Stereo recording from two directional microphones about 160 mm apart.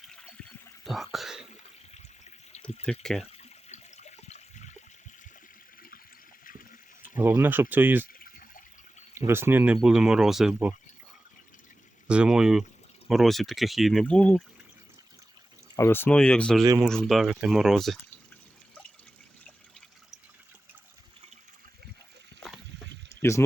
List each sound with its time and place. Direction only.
0.9 s speech: centre (ahead or behind)
3.0 s speech: 5° left (ahead or behind)
3.3 s toilet flush: 45° left (ahead or behind)
6.4 s water: 60° left (ahead or behind)
7.2 s speech: 10° right (ahead or behind)
8.0 s a sound: 60° left (ahead or behind)
9.1 s speech: 15° right (ahead or behind)
12.0 s speech: 5° right (ahead or behind)
15.7 s speech: 15° left (ahead or behind); by 17.9 s centre (ahead or behind)